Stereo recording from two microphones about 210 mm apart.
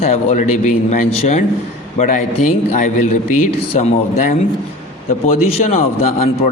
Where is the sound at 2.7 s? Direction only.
35° left (ahead or behind).